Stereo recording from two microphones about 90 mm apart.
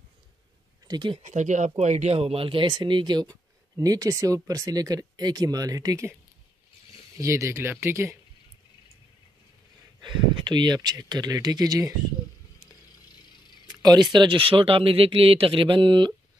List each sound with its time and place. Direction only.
0.8 s speech: 50° right (ahead or behind)
1.7 s speech: 90° right
2.8 s speech: 55° right (ahead or behind)
3.7 s speech: 40° right (ahead or behind)
7.2 s speech: 35° right (ahead or behind)
10.0 s speech: 55° right (ahead or behind)
13.7 s speech: 50° right (ahead or behind)